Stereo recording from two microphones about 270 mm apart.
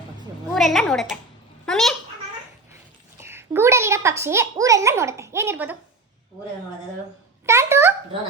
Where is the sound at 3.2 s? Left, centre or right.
Centre.